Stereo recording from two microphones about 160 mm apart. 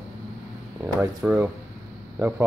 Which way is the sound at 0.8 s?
10° right (ahead or behind).